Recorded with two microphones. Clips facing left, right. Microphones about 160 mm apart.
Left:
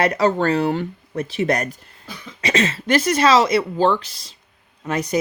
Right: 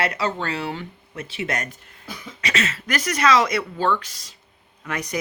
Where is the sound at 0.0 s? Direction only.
40° left (ahead or behind).